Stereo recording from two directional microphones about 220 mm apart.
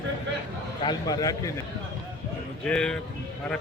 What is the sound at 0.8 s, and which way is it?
Speech, 20° left (ahead or behind).